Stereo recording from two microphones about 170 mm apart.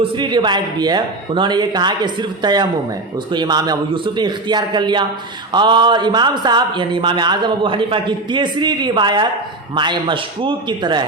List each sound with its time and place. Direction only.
0.1 s a man's voice: 25° right (ahead or behind)